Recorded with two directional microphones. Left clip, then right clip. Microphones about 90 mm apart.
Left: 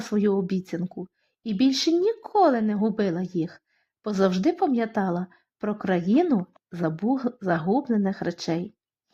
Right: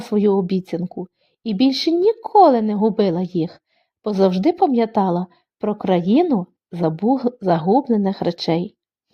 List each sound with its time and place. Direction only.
0.0 s speech: 25° right (ahead or behind)
0.8 s speech: 20° right (ahead or behind); by 8.7 s 40° right (ahead or behind)